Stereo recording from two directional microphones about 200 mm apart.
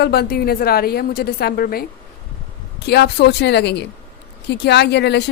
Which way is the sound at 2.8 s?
55° left (ahead or behind).